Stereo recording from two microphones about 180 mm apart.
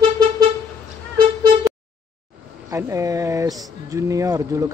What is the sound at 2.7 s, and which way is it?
Speech, 15° right (ahead or behind).